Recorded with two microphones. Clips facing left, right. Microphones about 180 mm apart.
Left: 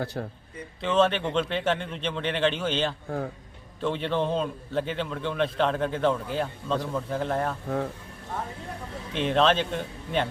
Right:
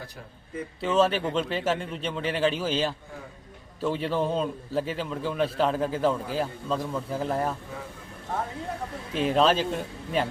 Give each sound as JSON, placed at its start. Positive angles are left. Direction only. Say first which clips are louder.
{"t": 0.0, "sound": "speech", "louder": "left 11 dB", "side_deg": 70}
{"t": 0.8, "sound": "a man's voice", "louder": "even", "side_deg": -5}
{"t": 9.1, "sound": "a man's voice", "louder": "even", "side_deg": -5}